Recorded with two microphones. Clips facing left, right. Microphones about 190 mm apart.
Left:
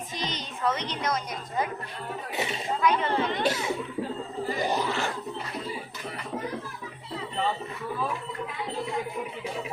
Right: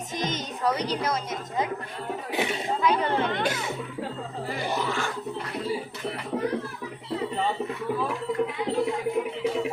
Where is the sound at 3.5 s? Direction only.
10° left (ahead or behind).